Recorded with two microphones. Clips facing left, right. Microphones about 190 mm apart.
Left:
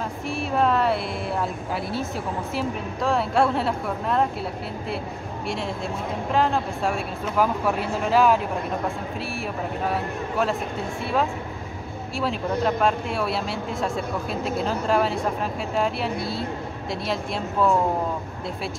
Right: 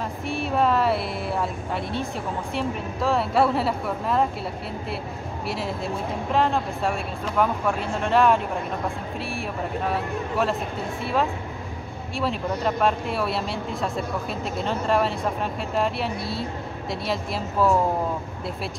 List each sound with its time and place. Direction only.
0.3 s a woman's voice: centre (ahead or behind)
6.3 s speech: centre (ahead or behind)
9.8 s speech: centre (ahead or behind)
12.2 s speech: centre (ahead or behind)